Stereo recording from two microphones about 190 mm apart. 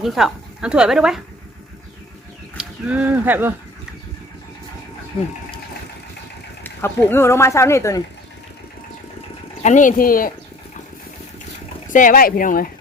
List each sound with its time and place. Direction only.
0.0 s speech: centre (ahead or behind)
2.6 s speech: 5° right (ahead or behind)
6.6 s speech: 10° left (ahead or behind)
9.6 s speech: 40° left (ahead or behind)
11.9 s speech: 45° left (ahead or behind)